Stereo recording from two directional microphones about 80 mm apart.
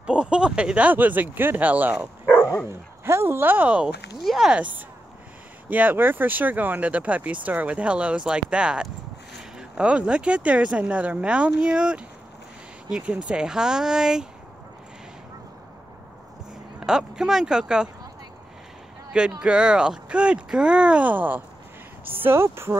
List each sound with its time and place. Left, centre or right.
0.0 s speech: centre
3.1 s speech: right
4.2 s speech: centre
4.5 s speech: centre
16.8 s speech: centre
19.4 s speech: centre; by 22.8 s right